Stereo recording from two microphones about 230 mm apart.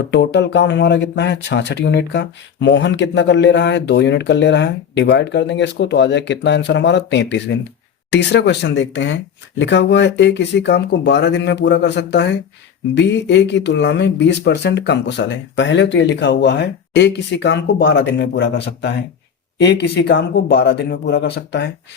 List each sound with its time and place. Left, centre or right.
0.0 s speech: left